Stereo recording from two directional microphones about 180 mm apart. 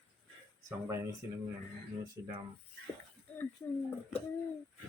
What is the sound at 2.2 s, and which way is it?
Speech, 25° right (ahead or behind).